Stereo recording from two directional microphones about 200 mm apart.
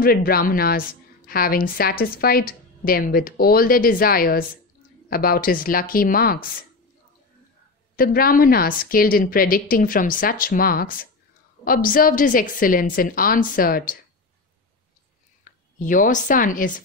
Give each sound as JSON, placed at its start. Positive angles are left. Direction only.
{"t": 0.0, "sound": "a woman's voice", "side_deg": 50}
{"t": 7.9, "sound": "a woman's voice", "side_deg": 45}
{"t": 15.8, "sound": "speech", "side_deg": 40}